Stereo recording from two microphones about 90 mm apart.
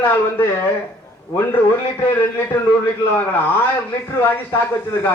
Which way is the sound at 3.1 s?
20° left (ahead or behind).